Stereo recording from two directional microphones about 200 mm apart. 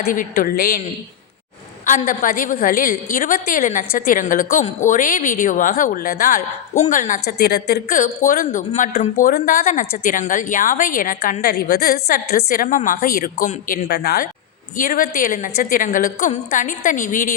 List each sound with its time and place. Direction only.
0.0 s a woman's voice: 40° left (ahead or behind)
1.9 s a woman's voice: 40° left (ahead or behind)
7.3 s a woman's voice: 55° left (ahead or behind)